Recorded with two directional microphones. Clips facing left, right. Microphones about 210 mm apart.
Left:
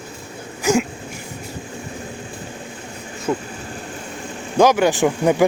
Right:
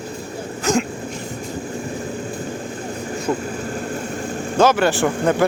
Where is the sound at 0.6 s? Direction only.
10° left (ahead or behind).